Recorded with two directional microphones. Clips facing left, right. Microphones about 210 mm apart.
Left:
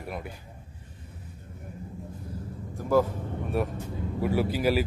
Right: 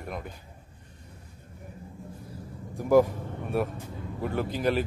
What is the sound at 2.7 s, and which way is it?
Speech, 15° right (ahead or behind).